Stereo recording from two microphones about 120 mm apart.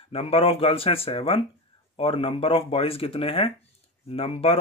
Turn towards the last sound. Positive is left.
turn(degrees=55)  # may be behind; listen again after turning